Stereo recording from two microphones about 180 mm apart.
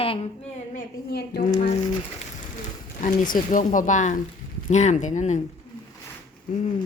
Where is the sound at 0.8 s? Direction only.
60° left (ahead or behind).